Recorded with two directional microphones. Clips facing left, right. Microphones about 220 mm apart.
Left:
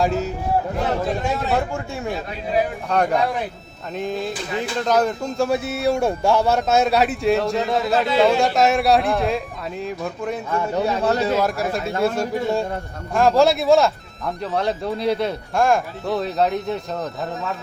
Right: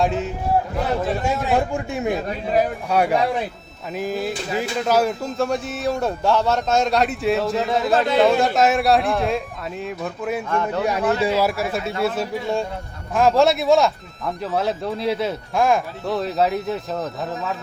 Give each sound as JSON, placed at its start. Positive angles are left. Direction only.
{"t": 0.0, "sound": "speech", "side_deg": 0}
{"t": 1.5, "sound": "speech", "side_deg": -15}
{"t": 10.5, "sound": "a man's voice", "side_deg": 15}
{"t": 11.0, "sound": "speech", "side_deg": 40}
{"t": 11.3, "sound": "speech", "side_deg": -10}